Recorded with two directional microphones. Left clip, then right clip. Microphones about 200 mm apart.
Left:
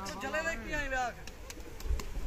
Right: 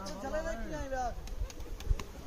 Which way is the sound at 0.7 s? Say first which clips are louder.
Left 3 dB; 40° left (ahead or behind).